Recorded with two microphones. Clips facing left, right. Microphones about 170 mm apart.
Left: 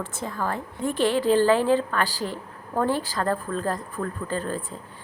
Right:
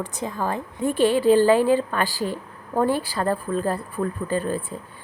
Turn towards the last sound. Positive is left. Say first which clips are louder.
# right 4 dB
turn(degrees=-10)  # may be behind; listen again after turning